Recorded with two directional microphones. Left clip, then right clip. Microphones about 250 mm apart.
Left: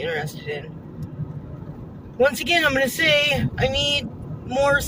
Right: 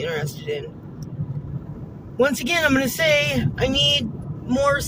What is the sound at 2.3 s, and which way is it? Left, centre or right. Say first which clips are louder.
Speech: left 2 dB; centre.